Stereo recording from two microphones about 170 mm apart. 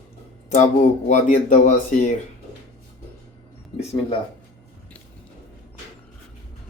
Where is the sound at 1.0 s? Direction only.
45° left (ahead or behind).